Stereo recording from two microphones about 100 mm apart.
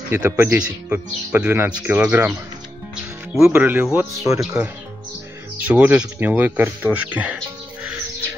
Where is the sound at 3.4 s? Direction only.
15° right (ahead or behind).